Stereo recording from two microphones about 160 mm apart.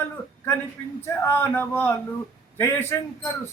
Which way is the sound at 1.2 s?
15° left (ahead or behind).